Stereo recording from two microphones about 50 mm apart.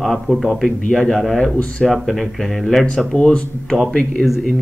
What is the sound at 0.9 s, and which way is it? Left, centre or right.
Speech, centre.